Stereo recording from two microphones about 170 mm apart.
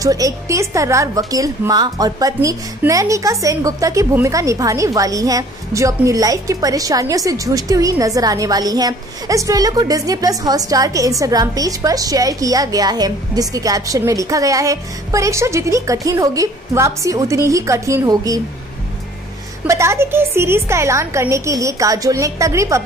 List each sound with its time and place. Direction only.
0.0 s a woman's voice: 20° right (ahead or behind)
19.7 s a woman's voice: 15° right (ahead or behind)